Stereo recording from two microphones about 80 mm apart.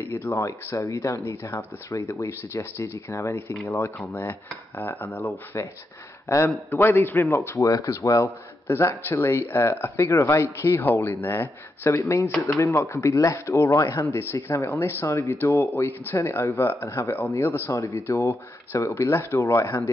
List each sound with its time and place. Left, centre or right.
0.0 s speech: left
4.2 s dishes: left
6.2 s a man's voice: left
6.7 s dishes: left
7.9 s speech: left
12.3 s speech: centre
12.5 s speech: left